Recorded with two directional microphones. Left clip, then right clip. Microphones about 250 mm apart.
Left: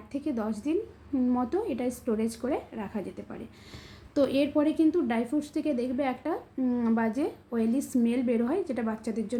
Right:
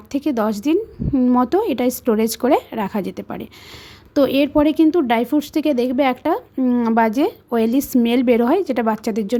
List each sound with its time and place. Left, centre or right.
0.1 s speech: right